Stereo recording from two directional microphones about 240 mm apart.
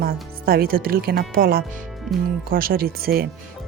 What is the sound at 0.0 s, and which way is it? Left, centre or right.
Speech, right.